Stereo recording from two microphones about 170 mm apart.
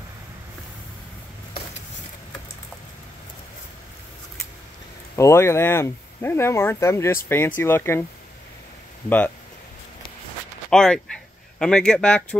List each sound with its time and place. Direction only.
5.1 s speech: 15° left (ahead or behind)
10.7 s speech: 5° left (ahead or behind)